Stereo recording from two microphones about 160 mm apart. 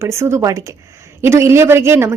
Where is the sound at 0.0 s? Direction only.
15° right (ahead or behind).